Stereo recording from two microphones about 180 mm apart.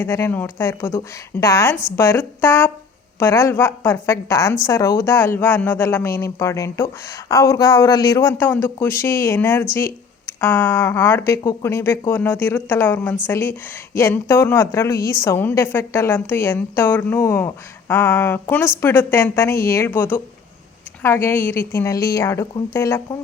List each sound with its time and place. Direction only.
0.0 s speech: 10° left (ahead or behind)